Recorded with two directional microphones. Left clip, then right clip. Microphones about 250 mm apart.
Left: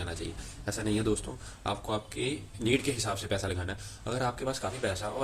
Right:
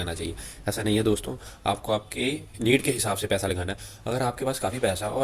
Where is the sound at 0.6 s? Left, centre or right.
Right.